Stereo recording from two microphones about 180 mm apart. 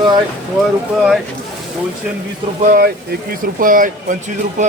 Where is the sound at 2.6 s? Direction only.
55° right (ahead or behind).